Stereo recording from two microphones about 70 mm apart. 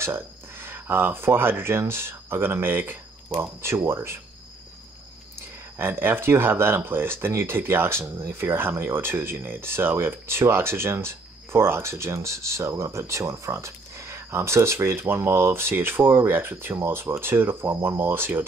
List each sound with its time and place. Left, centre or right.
0.0 s speech: right
5.8 s speech: right